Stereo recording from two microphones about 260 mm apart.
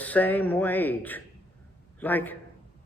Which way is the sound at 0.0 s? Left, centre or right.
Centre.